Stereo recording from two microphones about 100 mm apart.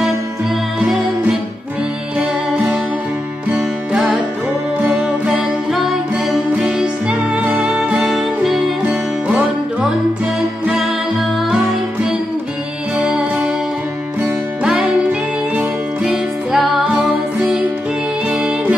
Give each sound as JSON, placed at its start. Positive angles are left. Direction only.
{"t": 3.5, "sound": "music", "side_deg": -5}
{"t": 8.8, "sound": "music", "side_deg": -15}
{"t": 11.4, "sound": "music", "side_deg": -5}
{"t": 12.9, "sound": "music", "side_deg": -15}
{"t": 14.6, "sound": "music", "side_deg": -10}